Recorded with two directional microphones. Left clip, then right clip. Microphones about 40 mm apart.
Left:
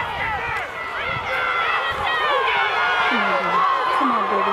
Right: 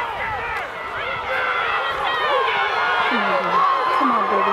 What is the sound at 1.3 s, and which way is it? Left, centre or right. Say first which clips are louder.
Run: even; centre.